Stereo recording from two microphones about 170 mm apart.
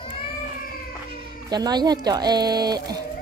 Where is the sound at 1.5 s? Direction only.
25° right (ahead or behind).